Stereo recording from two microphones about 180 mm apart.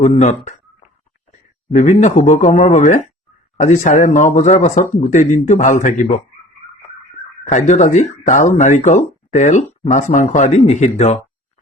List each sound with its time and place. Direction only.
0.0 s speech: 40° left (ahead or behind)
7.5 s speech: 45° left (ahead or behind)